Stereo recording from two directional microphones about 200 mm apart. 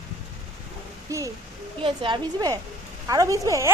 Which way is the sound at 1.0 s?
15° right (ahead or behind).